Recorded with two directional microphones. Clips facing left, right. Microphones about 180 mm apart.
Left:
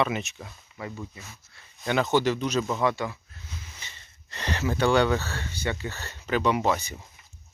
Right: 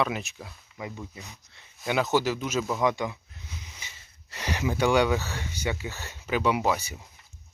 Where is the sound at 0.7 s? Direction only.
15° right (ahead or behind).